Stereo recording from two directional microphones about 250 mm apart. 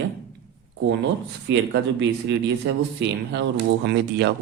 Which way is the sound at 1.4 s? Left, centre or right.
Right.